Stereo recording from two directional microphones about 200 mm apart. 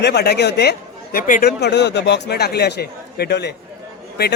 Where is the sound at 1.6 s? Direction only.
60° left (ahead or behind).